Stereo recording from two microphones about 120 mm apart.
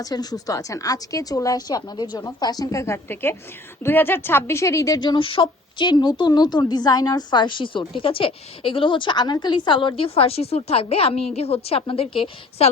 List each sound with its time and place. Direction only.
0.0 s a woman's voice: 35° left (ahead or behind)
4.9 s a woman's voice: 40° left (ahead or behind)